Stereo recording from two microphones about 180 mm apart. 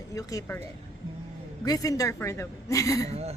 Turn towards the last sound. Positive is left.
turn(degrees=15)  # may be behind; listen again after turning